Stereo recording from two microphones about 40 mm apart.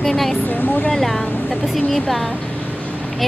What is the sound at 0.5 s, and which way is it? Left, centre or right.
Speech, left.